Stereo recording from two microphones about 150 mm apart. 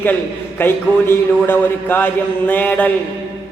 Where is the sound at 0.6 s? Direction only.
15° left (ahead or behind).